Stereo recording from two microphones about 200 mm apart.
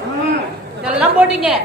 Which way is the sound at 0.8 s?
5° right (ahead or behind).